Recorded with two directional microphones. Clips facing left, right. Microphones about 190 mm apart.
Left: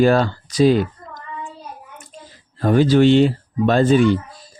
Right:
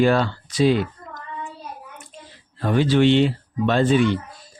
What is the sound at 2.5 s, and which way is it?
Speech, 40° left (ahead or behind).